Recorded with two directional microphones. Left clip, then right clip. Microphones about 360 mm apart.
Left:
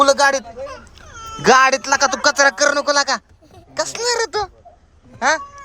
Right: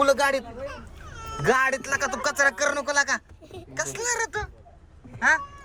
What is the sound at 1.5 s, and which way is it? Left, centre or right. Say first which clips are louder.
Speech: left 10 dB; centre.